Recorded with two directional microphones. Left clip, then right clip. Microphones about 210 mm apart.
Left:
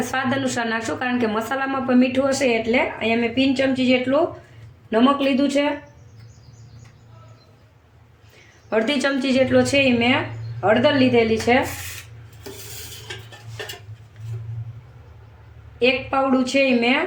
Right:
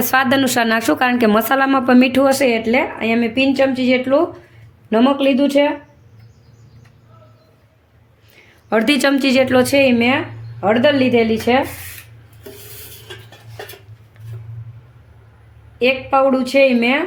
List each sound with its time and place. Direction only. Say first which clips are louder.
0.1 s a woman's voice: right 12 dB; 55° right (ahead or behind)
8.7 s a woman's voice: right 5 dB; 55° right (ahead or behind)
15.8 s a woman's voice: right 5 dB; 55° right (ahead or behind)